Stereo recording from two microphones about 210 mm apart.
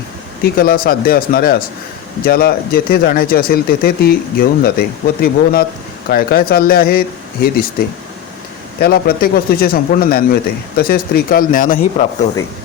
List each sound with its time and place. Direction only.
0.4 s speech: 45° left (ahead or behind)
8.8 s speech: 45° left (ahead or behind)